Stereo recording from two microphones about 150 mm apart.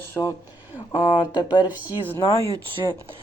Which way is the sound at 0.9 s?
30° left (ahead or behind).